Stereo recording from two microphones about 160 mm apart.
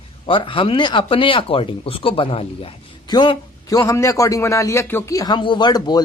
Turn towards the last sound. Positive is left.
turn(degrees=25)  # may be behind; listen again after turning